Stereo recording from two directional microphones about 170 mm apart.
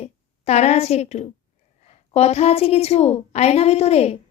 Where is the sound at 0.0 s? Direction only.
40° left (ahead or behind).